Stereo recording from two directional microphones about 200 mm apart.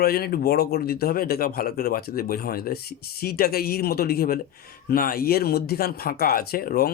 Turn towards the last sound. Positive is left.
turn(degrees=50)  # may be behind; listen again after turning